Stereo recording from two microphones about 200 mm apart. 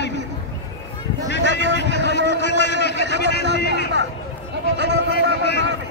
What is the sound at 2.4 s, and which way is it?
Speech, 60° left (ahead or behind).